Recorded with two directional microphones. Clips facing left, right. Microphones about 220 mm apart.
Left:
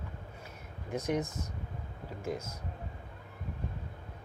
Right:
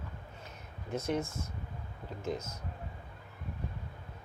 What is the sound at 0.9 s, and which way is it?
Speech, 15° left (ahead or behind).